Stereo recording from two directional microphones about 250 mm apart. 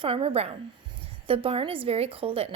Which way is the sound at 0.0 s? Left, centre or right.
Right.